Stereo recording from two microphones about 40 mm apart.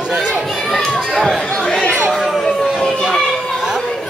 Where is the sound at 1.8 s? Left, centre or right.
Left.